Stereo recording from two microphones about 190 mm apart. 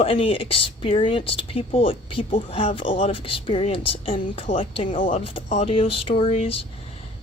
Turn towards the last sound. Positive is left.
turn(degrees=30)  # may be behind; listen again after turning